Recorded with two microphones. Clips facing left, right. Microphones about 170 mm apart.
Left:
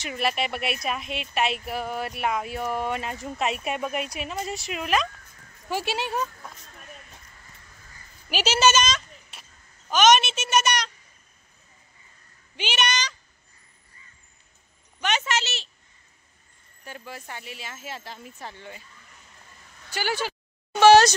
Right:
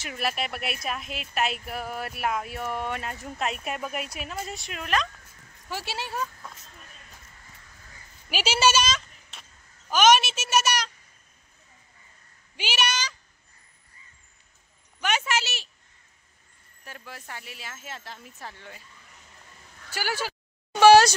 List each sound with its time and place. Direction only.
0.0 s a woman's voice: centre (ahead or behind); by 6.5 s 15° left (ahead or behind)
8.3 s a sound: 10° right (ahead or behind)
9.8 s a woman's voice: 10° right (ahead or behind)
12.5 s a woman's voice: 5° right (ahead or behind)
15.0 s speech: 10° right (ahead or behind)
16.8 s a woman's voice: centre (ahead or behind)
19.9 s speech: 5° right (ahead or behind)
20.8 s a sound: 10° right (ahead or behind)